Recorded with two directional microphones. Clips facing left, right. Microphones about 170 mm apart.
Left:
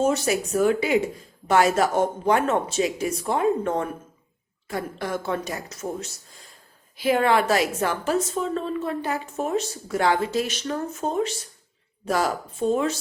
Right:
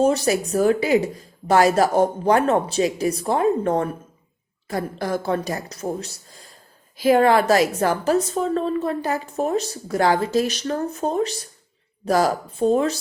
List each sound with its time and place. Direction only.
0.0 s speech: 35° right (ahead or behind)